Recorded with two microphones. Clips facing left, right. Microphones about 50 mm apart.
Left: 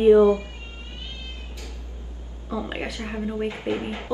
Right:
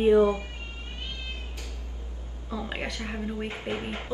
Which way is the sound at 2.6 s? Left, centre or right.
Centre.